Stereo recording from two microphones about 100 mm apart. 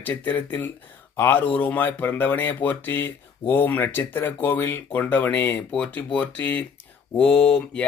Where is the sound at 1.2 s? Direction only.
20° left (ahead or behind).